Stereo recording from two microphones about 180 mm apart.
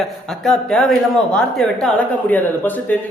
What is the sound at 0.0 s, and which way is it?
A man's voice, 5° left (ahead or behind).